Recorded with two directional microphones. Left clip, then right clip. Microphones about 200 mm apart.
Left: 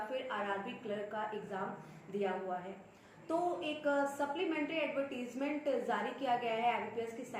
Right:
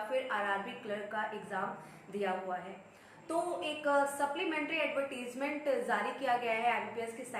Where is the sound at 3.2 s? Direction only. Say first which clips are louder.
Right 1 dB; 10° right (ahead or behind).